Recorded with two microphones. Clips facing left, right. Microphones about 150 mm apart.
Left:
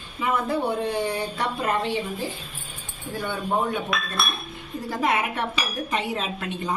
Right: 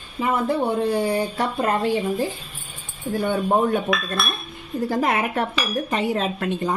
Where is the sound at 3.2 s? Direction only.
45° right (ahead or behind).